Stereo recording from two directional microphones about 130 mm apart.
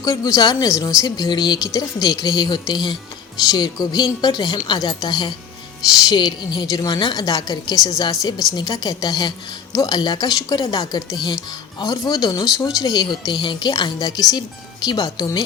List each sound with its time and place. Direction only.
0.0 s a woman's voice: 25° left (ahead or behind)